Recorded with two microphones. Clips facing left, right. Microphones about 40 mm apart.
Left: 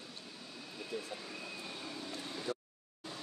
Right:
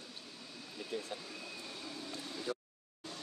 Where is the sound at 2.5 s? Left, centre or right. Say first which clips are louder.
Even; centre.